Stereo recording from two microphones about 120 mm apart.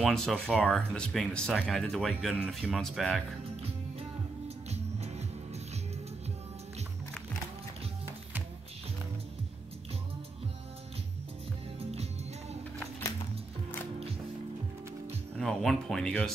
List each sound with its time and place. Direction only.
0.0 s speech: 5° left (ahead or behind)
2.3 s speech: 5° right (ahead or behind)
4.6 s music: 65° right (ahead or behind)
11.8 s music: 60° right (ahead or behind)
15.3 s speech: 5° left (ahead or behind)